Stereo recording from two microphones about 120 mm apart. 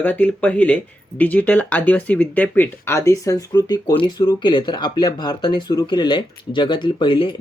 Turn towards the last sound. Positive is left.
turn(degrees=45)  # may be behind; listen again after turning